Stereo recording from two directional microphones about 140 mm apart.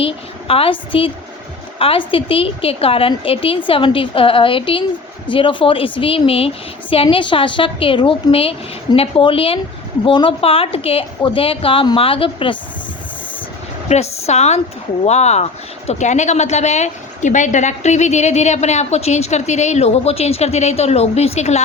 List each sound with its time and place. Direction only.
0.0 s a woman's voice: 40° left (ahead or behind)
13.8 s a woman's voice: 50° left (ahead or behind)